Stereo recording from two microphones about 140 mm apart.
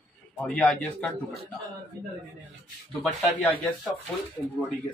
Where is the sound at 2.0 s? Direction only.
25° right (ahead or behind).